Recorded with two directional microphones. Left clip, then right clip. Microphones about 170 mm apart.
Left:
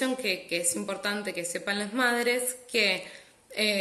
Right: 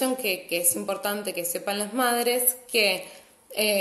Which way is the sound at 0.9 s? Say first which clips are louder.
Right 3 dB; 10° left (ahead or behind).